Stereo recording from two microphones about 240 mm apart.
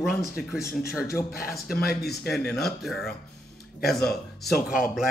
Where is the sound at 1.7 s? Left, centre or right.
Left.